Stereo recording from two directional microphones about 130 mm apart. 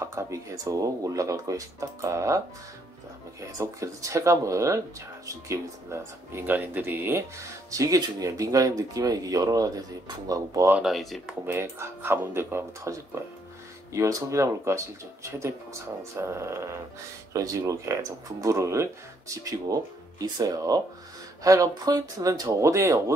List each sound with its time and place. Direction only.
0.0 s speech: 20° right (ahead or behind)
10.7 s speech: 5° right (ahead or behind)
11.4 s speech: 20° right (ahead or behind)